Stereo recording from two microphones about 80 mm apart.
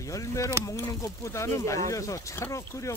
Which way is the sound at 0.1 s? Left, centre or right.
Left.